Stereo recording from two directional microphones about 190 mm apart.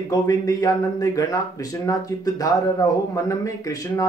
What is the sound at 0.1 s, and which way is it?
Speech, 20° left (ahead or behind).